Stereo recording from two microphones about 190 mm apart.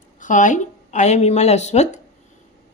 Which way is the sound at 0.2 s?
40° left (ahead or behind).